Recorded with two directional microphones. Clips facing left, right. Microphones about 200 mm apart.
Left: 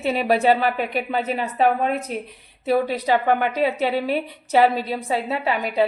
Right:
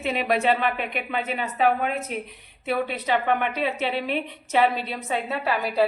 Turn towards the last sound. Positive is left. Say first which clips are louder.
# left 2 dB
turn(degrees=25)  # may be behind; listen again after turning